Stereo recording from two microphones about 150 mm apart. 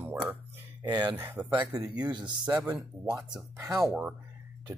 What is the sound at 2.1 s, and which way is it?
Speech, 30° right (ahead or behind).